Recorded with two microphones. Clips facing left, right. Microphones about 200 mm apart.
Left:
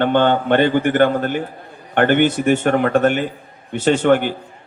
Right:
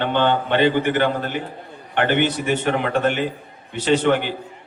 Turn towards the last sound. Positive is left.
turn(degrees=50)  # may be behind; listen again after turning